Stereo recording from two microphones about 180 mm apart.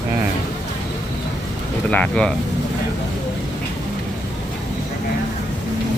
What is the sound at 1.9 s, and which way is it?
Speech, 5° left (ahead or behind).